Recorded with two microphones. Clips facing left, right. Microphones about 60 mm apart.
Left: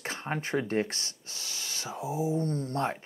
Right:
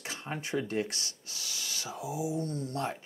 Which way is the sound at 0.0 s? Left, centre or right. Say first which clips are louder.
Left 4 dB; left.